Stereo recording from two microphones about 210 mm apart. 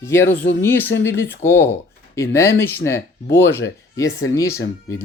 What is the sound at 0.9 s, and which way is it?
Speech, 55° left (ahead or behind).